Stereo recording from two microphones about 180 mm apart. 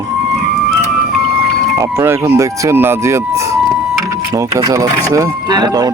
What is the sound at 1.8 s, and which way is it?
Speech, 15° right (ahead or behind).